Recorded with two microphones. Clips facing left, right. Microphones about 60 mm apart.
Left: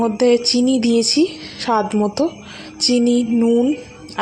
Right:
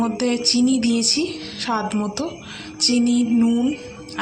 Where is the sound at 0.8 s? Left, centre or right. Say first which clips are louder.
Left 6 dB; left.